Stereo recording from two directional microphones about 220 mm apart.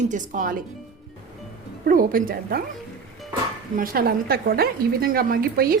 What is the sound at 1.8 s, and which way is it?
Speech, 40° right (ahead or behind).